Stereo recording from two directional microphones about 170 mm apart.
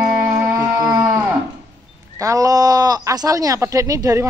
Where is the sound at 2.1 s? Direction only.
20° right (ahead or behind).